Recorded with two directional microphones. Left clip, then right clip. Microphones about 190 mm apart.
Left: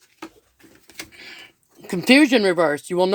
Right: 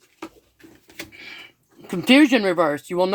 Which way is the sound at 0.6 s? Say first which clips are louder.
Even; 35° left (ahead or behind).